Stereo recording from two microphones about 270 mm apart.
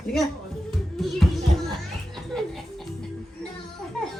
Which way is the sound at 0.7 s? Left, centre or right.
Centre.